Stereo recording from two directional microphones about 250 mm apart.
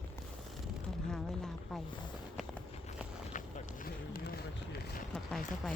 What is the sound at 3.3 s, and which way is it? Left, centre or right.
Run, left.